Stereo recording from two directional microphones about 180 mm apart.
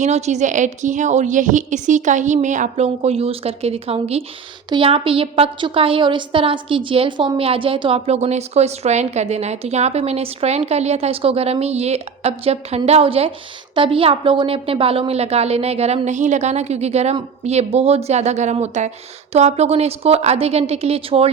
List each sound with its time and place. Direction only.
0.0 s a woman's voice: 40° right (ahead or behind)